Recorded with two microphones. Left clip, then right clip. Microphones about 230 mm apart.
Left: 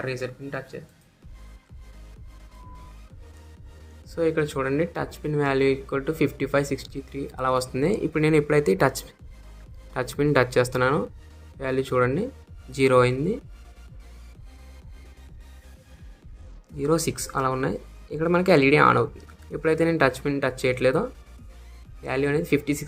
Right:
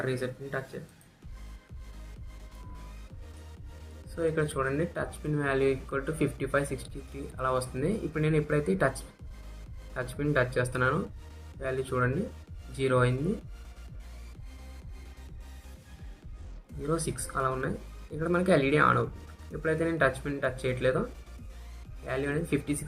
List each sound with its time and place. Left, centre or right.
0.0 s speech: left
4.1 s speech: left
9.9 s speech: left
16.8 s speech: left
22.0 s speech: left